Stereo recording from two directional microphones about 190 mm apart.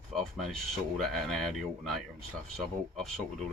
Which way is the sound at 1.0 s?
Centre (ahead or behind).